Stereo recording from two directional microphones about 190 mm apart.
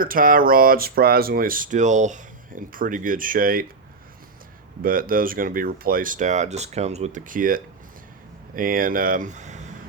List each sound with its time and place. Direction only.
0.0 s speech: 45° right (ahead or behind)
4.8 s speech: 50° right (ahead or behind)